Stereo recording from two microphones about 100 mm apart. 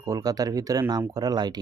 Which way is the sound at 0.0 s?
35° right (ahead or behind).